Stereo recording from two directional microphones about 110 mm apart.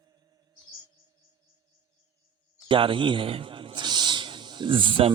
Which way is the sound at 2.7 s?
50° right (ahead or behind).